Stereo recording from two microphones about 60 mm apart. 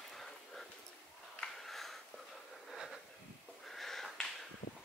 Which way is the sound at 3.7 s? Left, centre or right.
Centre.